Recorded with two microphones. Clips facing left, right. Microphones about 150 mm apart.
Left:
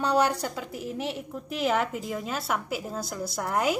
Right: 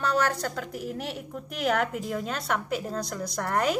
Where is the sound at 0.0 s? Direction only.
15° left (ahead or behind).